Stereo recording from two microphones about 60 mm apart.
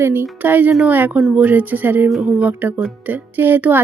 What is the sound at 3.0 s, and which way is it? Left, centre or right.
Speech, right.